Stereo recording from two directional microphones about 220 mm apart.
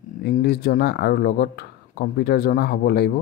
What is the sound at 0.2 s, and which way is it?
Speech, 50° left (ahead or behind).